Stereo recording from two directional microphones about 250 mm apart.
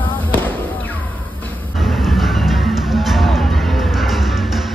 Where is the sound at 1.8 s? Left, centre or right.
Centre.